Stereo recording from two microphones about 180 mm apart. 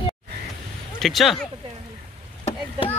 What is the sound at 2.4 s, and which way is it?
Chop, 30° left (ahead or behind).